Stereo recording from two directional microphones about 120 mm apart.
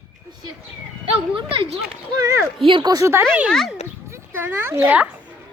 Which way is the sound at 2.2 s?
25° right (ahead or behind).